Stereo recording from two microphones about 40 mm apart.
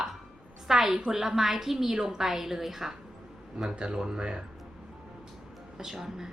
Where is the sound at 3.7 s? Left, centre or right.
Right.